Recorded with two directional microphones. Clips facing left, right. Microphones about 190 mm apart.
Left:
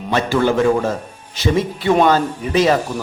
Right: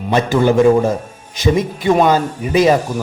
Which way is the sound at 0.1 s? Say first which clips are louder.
Right 3 dB; 15° right (ahead or behind).